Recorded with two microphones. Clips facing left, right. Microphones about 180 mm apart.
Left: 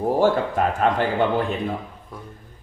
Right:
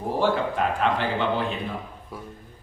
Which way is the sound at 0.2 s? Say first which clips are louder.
Left 1 dB; 45° left (ahead or behind).